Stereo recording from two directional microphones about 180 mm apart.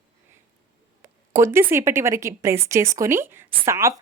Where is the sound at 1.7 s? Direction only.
15° right (ahead or behind).